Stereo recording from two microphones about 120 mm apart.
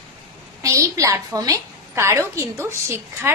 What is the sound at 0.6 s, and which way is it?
A woman's voice, 25° right (ahead or behind).